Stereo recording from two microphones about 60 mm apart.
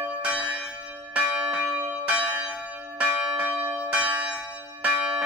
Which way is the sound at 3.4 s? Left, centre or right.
Right.